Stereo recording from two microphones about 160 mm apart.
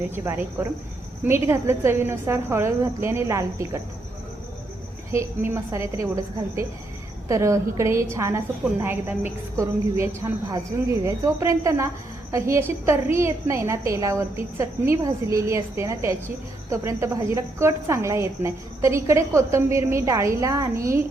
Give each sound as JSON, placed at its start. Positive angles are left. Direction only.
{"t": 0.1, "sound": "a woman's voice", "side_deg": -15}
{"t": 5.1, "sound": "a woman's voice", "side_deg": -15}
{"t": 7.3, "sound": "a woman's voice", "side_deg": -20}